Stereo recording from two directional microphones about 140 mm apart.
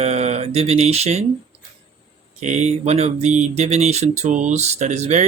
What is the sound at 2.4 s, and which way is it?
Speech, 55° right (ahead or behind).